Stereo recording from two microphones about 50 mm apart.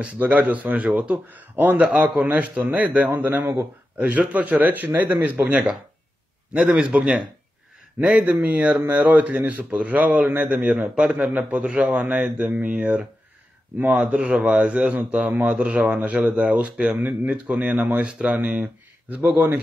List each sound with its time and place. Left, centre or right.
0.0 s speech: right
8.4 s speech: right
18.4 s speech: right